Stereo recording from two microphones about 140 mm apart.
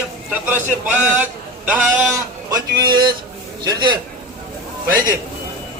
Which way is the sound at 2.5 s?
35° right (ahead or behind).